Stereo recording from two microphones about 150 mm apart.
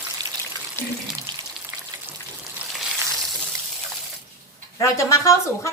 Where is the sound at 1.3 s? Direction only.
30° right (ahead or behind).